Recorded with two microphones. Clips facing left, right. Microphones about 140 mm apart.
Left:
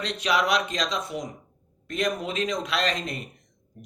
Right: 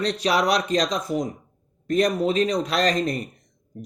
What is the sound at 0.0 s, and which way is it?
Speech, 35° right (ahead or behind).